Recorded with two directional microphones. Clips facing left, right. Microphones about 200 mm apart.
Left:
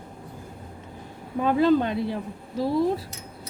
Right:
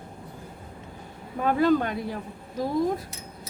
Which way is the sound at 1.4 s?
20° left (ahead or behind).